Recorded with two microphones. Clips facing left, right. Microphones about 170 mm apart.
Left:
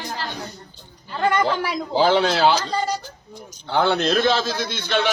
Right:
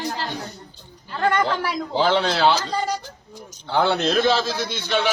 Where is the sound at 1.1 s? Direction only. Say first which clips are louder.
Left 1 dB; 10° left (ahead or behind).